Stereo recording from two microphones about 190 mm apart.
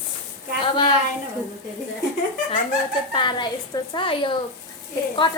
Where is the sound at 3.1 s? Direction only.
25° left (ahead or behind).